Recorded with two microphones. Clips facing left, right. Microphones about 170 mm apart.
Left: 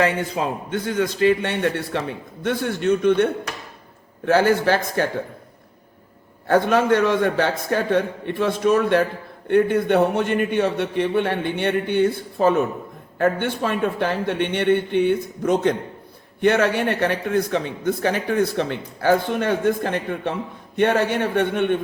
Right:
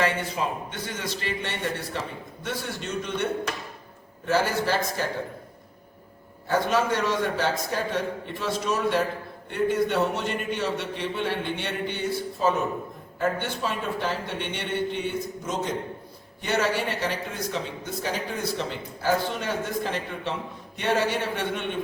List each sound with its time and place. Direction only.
0.4 s a man's voice: 85° left
1.3 s speech: 60° left (ahead or behind)
4.3 s speech: 60° left (ahead or behind)
6.5 s speech: 60° left (ahead or behind)